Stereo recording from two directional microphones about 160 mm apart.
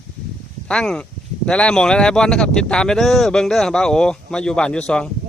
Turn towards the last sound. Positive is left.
turn(degrees=5)  # may be behind; listen again after turning